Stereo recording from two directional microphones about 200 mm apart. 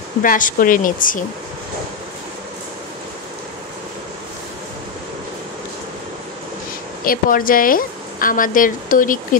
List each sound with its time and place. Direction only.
0.2 s speech: 40° left (ahead or behind)
7.1 s speech: 45° left (ahead or behind)